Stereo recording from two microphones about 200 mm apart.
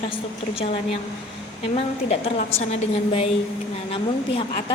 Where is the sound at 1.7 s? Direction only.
30° left (ahead or behind).